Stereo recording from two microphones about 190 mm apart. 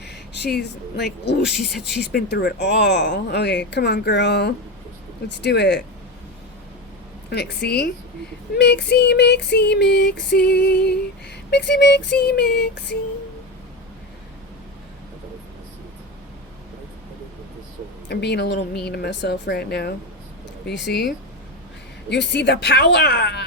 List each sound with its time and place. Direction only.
0.0 s speech: 60° left (ahead or behind)
7.3 s a woman's voice: 60° left (ahead or behind)
18.1 s speech: 60° left (ahead or behind)
22.3 s speech: 65° left (ahead or behind)